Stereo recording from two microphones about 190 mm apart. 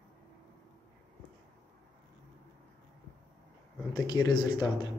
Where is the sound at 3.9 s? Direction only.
20° left (ahead or behind).